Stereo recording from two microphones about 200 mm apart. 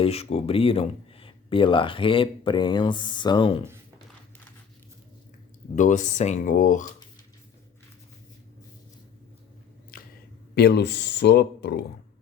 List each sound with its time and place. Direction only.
0.0 s speech: 30° left (ahead or behind)
5.7 s speech: 40° left (ahead or behind)
10.5 s speech: 55° left (ahead or behind)